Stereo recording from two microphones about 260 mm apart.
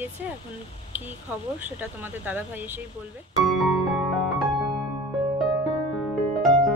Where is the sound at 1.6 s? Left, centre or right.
Centre.